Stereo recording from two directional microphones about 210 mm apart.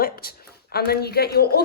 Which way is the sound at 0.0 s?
45° left (ahead or behind).